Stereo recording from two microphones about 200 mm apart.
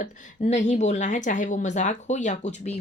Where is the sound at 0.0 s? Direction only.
35° left (ahead or behind).